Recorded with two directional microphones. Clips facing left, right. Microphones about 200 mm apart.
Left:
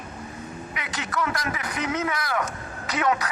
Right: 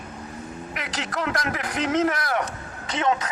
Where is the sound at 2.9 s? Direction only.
25° right (ahead or behind).